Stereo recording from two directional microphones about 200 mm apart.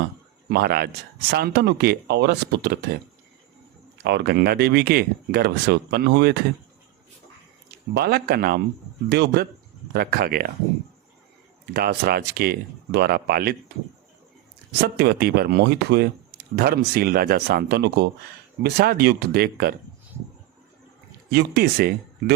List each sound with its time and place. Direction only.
0.5 s speech: 50° right (ahead or behind)
4.0 s speech: 55° right (ahead or behind)
7.9 s speech: 50° right (ahead or behind)
11.6 s speech: 50° right (ahead or behind)
14.8 s speech: 55° right (ahead or behind)
21.2 s speech: 55° right (ahead or behind)